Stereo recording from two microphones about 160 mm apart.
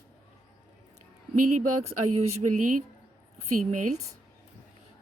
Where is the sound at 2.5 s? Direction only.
55° right (ahead or behind).